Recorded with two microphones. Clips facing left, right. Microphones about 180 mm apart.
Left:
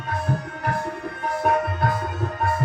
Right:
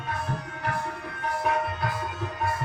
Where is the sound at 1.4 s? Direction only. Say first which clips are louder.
Left 6 dB; 50° left (ahead or behind).